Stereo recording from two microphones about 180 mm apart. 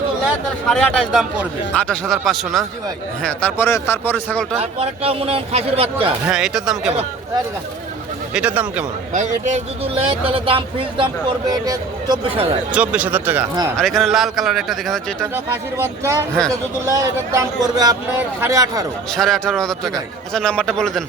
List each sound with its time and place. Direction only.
0.7 s a man's voice: centre (ahead or behind)
4.5 s speech: 35° right (ahead or behind)
6.2 s a man's voice: 5° right (ahead or behind)
8.3 s a man's voice: 5° right (ahead or behind)
9.1 s speech: 40° right (ahead or behind)
12.7 s a man's voice: 5° right (ahead or behind)
15.8 s a man's voice: 15° right (ahead or behind)
19.1 s a man's voice: centre (ahead or behind)